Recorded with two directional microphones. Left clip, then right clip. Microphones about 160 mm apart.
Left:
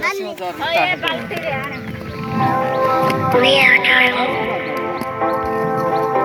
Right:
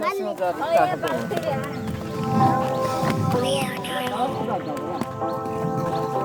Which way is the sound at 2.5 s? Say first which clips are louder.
Left 6 dB; 15° left (ahead or behind).